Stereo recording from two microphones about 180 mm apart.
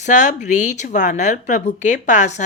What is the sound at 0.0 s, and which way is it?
A woman's voice, 40° left (ahead or behind).